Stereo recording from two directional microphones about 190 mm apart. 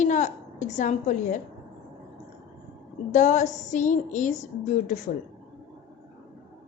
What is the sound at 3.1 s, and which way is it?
A woman's voice, 40° left (ahead or behind).